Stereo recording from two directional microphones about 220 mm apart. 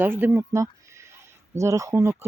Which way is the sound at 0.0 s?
10° right (ahead or behind).